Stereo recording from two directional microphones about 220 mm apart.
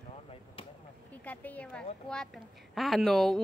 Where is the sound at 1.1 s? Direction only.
5° left (ahead or behind).